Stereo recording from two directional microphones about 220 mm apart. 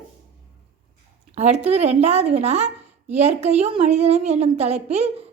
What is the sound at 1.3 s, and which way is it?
A woman's voice, 30° right (ahead or behind).